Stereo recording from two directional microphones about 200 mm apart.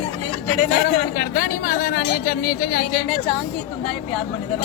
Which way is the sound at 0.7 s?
45° left (ahead or behind).